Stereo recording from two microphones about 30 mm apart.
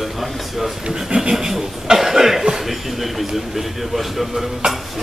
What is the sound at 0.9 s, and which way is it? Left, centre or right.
A man's voice, centre.